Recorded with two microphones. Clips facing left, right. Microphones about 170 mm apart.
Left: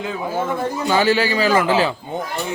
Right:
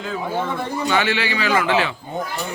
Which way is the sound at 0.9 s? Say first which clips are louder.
Left 5 dB; 40° left (ahead or behind).